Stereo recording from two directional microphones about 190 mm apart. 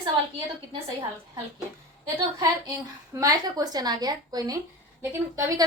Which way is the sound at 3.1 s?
15° right (ahead or behind).